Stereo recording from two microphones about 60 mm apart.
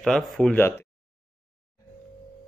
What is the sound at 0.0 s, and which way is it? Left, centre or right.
Speech, centre.